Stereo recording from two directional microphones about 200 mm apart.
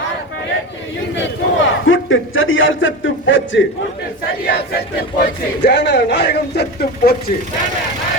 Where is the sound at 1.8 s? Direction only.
80° left.